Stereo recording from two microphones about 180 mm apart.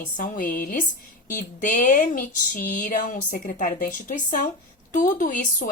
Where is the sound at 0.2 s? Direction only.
50° left (ahead or behind).